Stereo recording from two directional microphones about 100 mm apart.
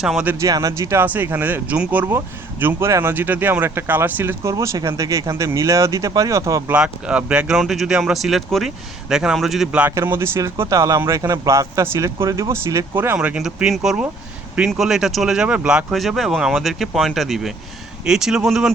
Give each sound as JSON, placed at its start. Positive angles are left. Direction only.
{"t": 0.3, "sound": "speech", "side_deg": -35}
{"t": 1.0, "sound": "speech", "side_deg": -20}
{"t": 4.5, "sound": "speech", "side_deg": -35}
{"t": 6.7, "sound": "speech", "side_deg": -10}
{"t": 10.1, "sound": "speech", "side_deg": -25}
{"t": 13.1, "sound": "speech", "side_deg": -10}